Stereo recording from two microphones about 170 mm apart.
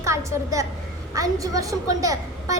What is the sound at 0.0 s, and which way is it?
A woman's voice, 15° right (ahead or behind).